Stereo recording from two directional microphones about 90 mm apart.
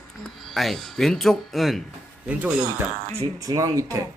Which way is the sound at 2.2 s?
20° right (ahead or behind).